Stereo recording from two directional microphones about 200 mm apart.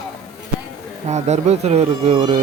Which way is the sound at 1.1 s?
35° right (ahead or behind).